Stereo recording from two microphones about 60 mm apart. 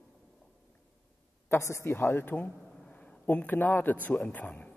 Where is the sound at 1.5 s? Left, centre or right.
Left.